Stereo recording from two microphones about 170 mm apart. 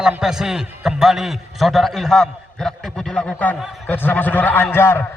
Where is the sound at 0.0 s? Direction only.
5° right (ahead or behind).